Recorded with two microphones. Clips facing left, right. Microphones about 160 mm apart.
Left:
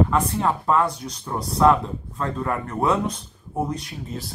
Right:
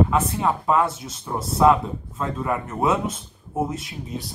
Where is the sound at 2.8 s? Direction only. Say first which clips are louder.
Even; centre (ahead or behind).